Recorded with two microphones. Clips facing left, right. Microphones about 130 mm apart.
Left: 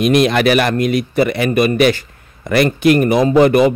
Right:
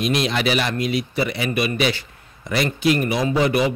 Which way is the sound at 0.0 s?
55° left (ahead or behind).